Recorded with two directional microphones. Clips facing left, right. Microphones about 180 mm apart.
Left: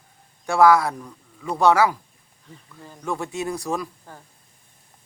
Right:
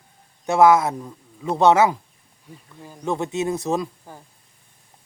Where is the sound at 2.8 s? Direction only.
10° right (ahead or behind).